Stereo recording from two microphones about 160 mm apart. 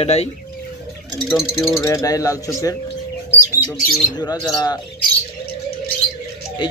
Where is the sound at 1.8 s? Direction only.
20° left (ahead or behind).